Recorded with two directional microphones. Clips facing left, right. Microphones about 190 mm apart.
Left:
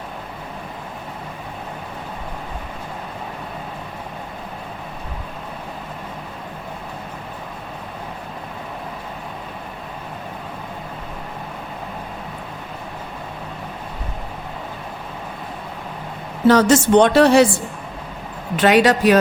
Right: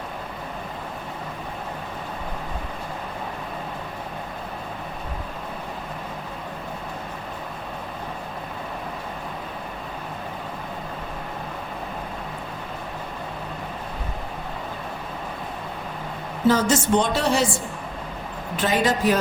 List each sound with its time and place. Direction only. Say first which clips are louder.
16.5 s a woman's voice: left 6 dB; 75° left (ahead or behind)
18.5 s speech: left 8 dB; 75° left (ahead or behind)